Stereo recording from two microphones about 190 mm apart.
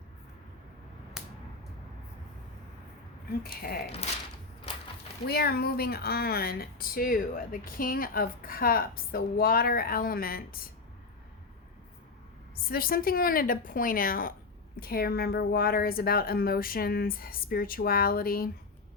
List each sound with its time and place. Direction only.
3.4 s speech: 55° left (ahead or behind)
5.3 s speech: 55° left (ahead or behind)
12.6 s speech: 50° left (ahead or behind)